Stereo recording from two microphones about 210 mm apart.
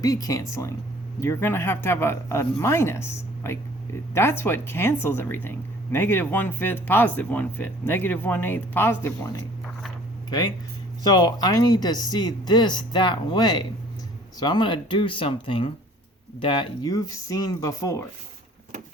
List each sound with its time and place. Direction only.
0.0 s speech: 15° left (ahead or behind)